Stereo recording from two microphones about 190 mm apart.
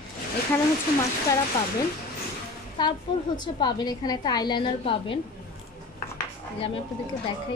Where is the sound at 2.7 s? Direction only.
25° left (ahead or behind).